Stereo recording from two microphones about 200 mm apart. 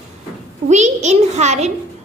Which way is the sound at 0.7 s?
35° right (ahead or behind).